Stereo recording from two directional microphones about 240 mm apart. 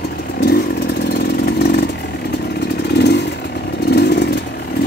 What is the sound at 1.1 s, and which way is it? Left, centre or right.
Vehicle, left.